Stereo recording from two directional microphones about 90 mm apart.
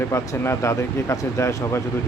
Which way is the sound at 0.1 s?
35° left (ahead or behind).